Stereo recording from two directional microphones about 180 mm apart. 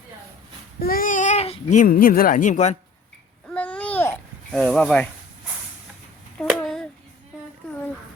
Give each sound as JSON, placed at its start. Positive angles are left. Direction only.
{"t": 0.8, "sound": "speech", "side_deg": 55}
{"t": 3.5, "sound": "babbling", "side_deg": 5}
{"t": 6.4, "sound": "a sound", "side_deg": 5}